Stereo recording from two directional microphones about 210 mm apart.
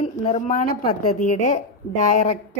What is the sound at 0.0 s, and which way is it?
A woman's voice, 30° left (ahead or behind).